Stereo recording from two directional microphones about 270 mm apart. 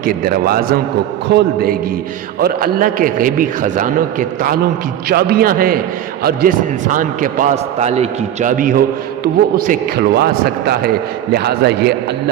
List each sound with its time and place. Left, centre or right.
0.0 s a man's voice: right